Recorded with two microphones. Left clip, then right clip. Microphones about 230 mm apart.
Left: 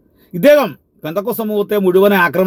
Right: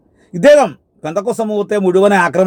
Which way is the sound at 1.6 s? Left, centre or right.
Centre.